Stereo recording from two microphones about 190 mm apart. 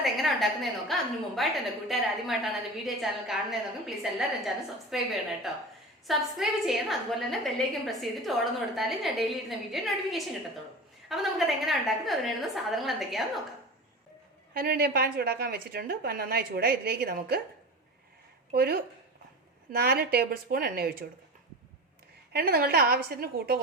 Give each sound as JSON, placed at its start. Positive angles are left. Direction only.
{"t": 0.0, "sound": "a sound", "side_deg": 0}
{"t": 1.4, "sound": "a woman's voice", "side_deg": 0}
{"t": 14.5, "sound": "a woman's voice", "side_deg": -50}
{"t": 18.5, "sound": "a woman's voice", "side_deg": -55}
{"t": 22.3, "sound": "a woman's voice", "side_deg": -55}